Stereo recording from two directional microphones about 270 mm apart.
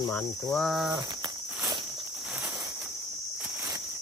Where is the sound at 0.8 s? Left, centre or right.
Centre.